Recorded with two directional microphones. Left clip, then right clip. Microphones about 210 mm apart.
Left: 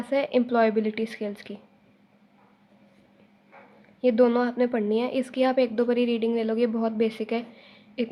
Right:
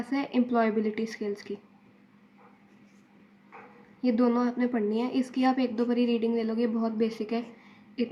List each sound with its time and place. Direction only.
0.0 s a woman's voice: 40° left (ahead or behind)
4.0 s a woman's voice: 40° left (ahead or behind)